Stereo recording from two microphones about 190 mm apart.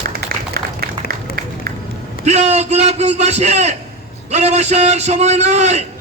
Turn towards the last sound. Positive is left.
turn(degrees=-35)  # may be behind; listen again after turning